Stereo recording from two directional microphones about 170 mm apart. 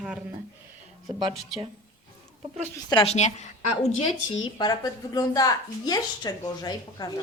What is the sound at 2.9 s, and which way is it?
Speech, 30° left (ahead or behind).